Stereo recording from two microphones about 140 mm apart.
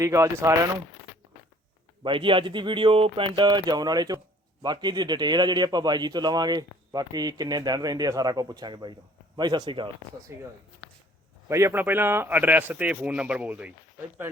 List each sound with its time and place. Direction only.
0.0 s a man's voice: 20° right (ahead or behind)
2.0 s a man's voice: 35° right (ahead or behind)
10.3 s a man's voice: 20° right (ahead or behind)